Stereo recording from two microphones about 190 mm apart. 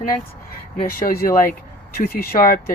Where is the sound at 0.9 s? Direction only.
50° left (ahead or behind).